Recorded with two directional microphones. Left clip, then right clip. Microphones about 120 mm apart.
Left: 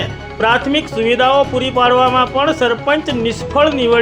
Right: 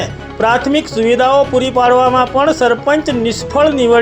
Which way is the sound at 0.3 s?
20° right (ahead or behind).